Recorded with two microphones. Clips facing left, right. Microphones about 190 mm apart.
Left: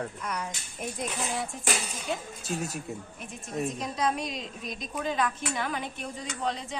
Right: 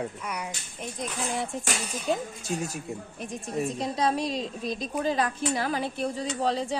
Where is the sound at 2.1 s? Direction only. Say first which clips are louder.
Right 6 dB; 35° right (ahead or behind).